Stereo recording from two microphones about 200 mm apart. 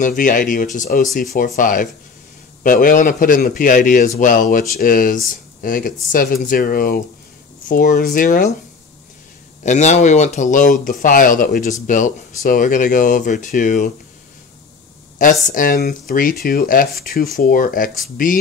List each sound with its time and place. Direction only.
0.0 s a man's voice: 40° left (ahead or behind)
9.6 s speech: 35° left (ahead or behind)
15.1 s a man's voice: 40° left (ahead or behind)